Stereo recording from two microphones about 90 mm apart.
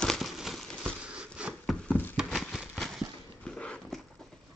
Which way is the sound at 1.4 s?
10° right (ahead or behind).